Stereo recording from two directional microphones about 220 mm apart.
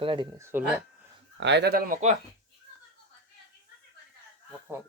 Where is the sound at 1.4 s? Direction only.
50° right (ahead or behind).